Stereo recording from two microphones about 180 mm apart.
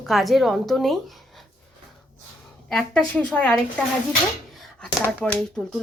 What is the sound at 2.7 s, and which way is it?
Speech, 5° left (ahead or behind).